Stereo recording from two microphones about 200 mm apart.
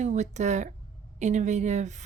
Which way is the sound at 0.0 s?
35° right (ahead or behind).